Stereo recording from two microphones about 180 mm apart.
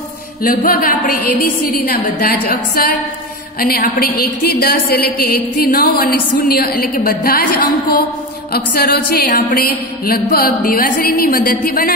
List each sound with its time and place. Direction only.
0.4 s a woman's voice: 50° left (ahead or behind)